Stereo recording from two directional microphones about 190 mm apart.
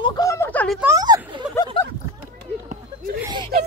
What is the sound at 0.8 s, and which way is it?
Speech, 15° right (ahead or behind).